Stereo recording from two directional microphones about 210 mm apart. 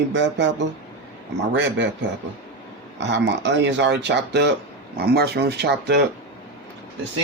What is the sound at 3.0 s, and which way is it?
Speech, 55° right (ahead or behind).